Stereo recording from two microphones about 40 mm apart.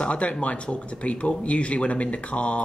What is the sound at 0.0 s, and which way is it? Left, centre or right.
Speech, left.